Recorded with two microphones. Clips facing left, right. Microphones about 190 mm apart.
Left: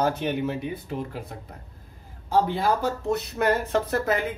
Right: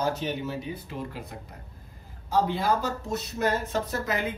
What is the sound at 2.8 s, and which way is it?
Speech, 60° left (ahead or behind).